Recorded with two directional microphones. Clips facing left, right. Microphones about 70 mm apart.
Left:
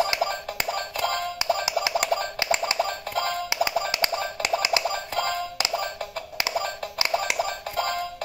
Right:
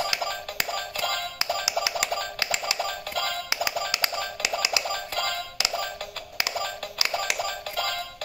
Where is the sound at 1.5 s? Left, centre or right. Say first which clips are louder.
Left 3 dB; left.